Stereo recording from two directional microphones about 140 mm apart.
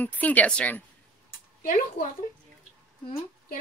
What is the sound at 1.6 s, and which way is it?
Speech, 90° left.